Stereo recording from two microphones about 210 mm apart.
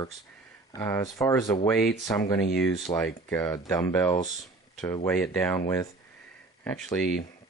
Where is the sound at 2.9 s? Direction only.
10° left (ahead or behind).